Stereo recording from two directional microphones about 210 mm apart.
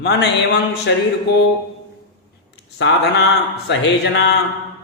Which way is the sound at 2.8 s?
60° left (ahead or behind).